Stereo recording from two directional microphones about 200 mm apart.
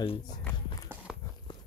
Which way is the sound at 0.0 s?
25° left (ahead or behind).